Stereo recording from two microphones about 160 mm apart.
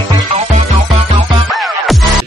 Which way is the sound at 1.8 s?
Centre (ahead or behind).